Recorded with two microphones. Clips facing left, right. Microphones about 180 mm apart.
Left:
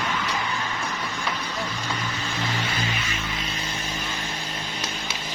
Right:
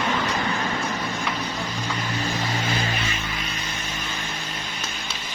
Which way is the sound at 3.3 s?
25° left (ahead or behind).